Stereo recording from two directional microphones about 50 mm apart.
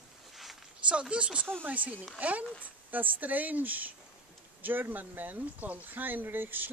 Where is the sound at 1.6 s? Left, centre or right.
Right.